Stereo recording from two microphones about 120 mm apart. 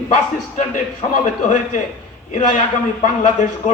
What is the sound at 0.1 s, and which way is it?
A man's voice, 90° left.